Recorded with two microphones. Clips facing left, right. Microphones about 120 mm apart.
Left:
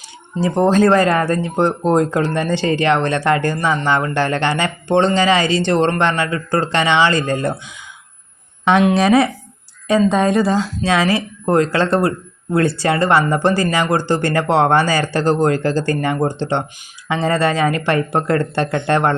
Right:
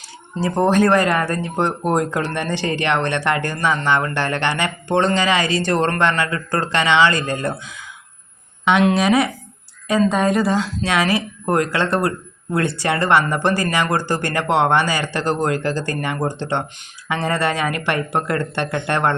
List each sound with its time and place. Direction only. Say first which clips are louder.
0.4 s speech: left 2 dB; 20° left (ahead or behind)
9.0 s speech: left 3 dB; 30° left (ahead or behind)